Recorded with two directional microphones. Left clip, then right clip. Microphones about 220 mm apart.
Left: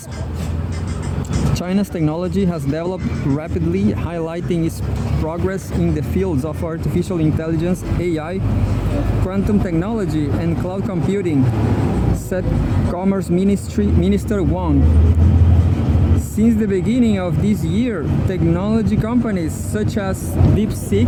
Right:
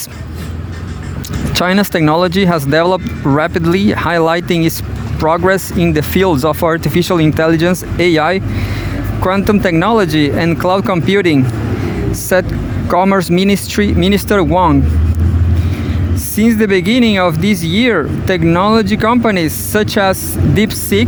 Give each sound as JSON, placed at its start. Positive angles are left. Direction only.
{"t": 1.5, "sound": "speech", "side_deg": -35}
{"t": 16.3, "sound": "speech", "side_deg": -35}